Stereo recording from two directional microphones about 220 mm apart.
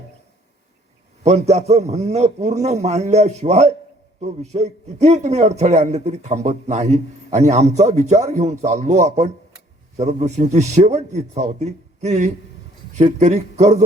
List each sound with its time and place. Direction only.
1.2 s a man's voice: 30° right (ahead or behind)